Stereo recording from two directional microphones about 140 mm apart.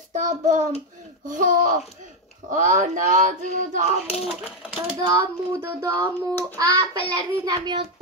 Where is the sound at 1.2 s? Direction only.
70° right (ahead or behind).